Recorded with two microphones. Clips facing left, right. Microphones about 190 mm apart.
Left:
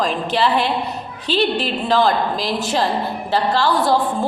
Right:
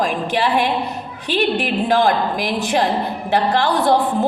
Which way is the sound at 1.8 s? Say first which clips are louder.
Even; 50° right (ahead or behind).